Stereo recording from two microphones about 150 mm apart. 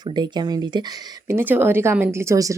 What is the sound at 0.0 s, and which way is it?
Speech, 30° right (ahead or behind).